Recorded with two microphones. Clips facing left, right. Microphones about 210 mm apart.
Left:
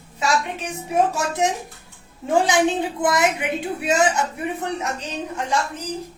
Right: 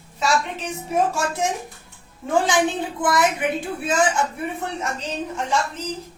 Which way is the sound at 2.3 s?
20° left (ahead or behind).